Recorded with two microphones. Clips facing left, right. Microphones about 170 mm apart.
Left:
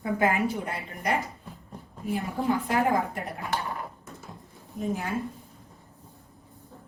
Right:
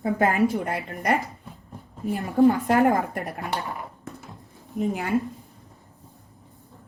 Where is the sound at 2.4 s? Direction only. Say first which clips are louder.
Right 9 dB; 65° right (ahead or behind).